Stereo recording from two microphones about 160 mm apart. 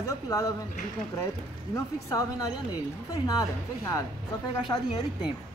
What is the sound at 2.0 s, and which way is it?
Speech, 20° left (ahead or behind).